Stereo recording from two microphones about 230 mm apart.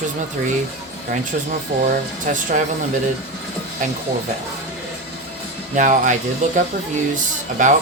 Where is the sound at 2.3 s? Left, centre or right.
Right.